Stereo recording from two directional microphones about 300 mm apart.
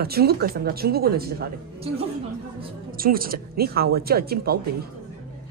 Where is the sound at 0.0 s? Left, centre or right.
Right.